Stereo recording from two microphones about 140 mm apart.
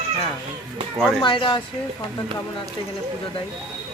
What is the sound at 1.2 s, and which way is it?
Speech, 35° left (ahead or behind).